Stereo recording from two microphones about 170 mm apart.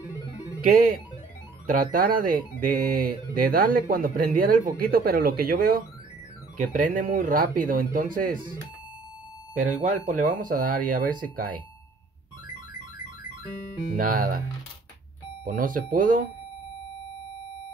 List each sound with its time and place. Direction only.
0.6 s speech: 55° right (ahead or behind)
9.8 s speech: 50° right (ahead or behind)
13.9 s speech: 55° right (ahead or behind)
15.4 s speech: 55° right (ahead or behind)